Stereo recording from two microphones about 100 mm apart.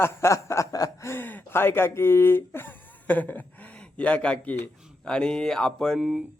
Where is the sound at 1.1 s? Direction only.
20° left (ahead or behind).